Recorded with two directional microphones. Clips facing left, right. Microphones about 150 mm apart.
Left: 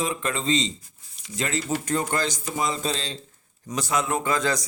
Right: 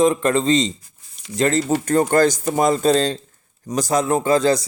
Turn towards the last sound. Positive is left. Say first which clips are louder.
# right 8 dB
turn(degrees=-30)  # may be behind; listen again after turning